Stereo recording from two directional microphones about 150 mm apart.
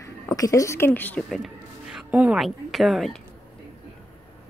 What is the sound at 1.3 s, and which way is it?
A woman's voice, centre (ahead or behind).